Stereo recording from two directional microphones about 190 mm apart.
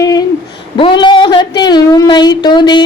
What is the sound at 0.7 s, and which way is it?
Speech, 25° left (ahead or behind).